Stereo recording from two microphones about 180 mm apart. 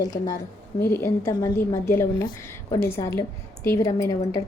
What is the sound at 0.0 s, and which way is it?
A woman's voice, 20° left (ahead or behind).